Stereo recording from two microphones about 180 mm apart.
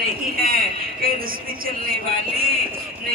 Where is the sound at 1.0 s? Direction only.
55° right (ahead or behind).